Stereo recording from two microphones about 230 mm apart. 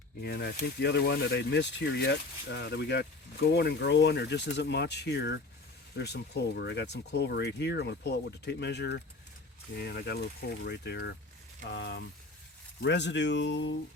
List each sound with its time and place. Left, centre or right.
0.2 s speech: left